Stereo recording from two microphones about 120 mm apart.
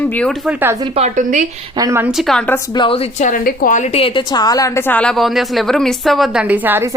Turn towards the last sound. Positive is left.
turn(degrees=-15)  # may be behind; listen again after turning